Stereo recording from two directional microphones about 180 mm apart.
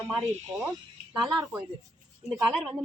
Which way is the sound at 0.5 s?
10° right (ahead or behind).